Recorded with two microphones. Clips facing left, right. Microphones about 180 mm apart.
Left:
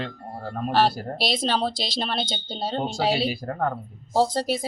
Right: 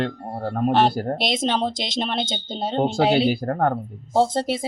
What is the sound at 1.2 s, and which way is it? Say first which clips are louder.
A woman's voice: even; 20° right (ahead or behind).